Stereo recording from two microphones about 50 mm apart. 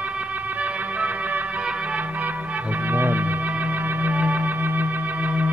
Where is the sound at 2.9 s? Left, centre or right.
Right.